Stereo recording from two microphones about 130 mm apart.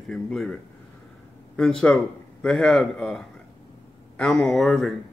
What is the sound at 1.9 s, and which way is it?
A man's voice, 10° left (ahead or behind).